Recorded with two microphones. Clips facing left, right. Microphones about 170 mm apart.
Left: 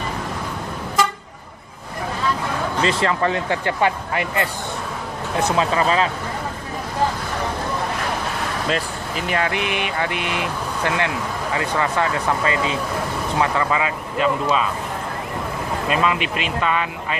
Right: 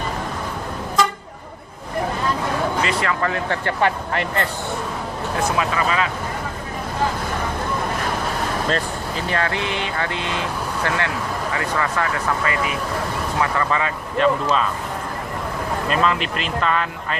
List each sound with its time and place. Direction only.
2.8 s speech: 25° left (ahead or behind); by 4.4 s 10° left (ahead or behind)
5.5 s speech: 30° left (ahead or behind)
9.3 s speech: 15° left (ahead or behind)
15.9 s speech: 5° left (ahead or behind)